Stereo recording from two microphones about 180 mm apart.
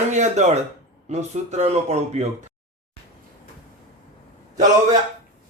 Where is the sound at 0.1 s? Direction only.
40° right (ahead or behind).